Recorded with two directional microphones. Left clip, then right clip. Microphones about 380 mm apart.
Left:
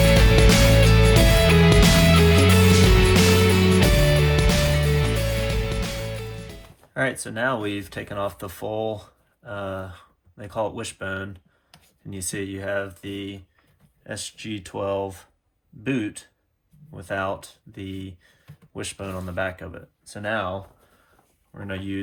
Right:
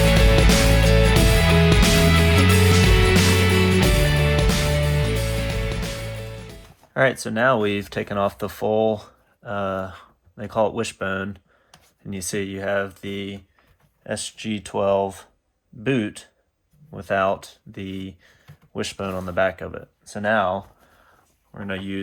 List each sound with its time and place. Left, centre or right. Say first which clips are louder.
0.1 s music: even; centre
6.9 s speech: right 6 dB; right